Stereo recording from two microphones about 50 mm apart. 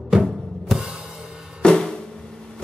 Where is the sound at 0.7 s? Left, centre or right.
Centre.